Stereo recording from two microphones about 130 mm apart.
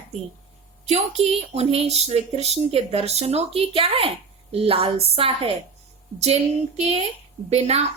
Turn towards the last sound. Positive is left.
turn(degrees=-55)  # may be behind; listen again after turning